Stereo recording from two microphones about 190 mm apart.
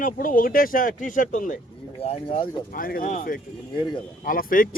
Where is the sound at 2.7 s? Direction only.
50° left (ahead or behind).